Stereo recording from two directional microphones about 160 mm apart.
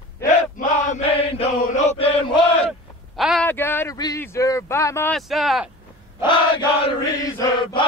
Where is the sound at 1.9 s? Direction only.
35° left (ahead or behind).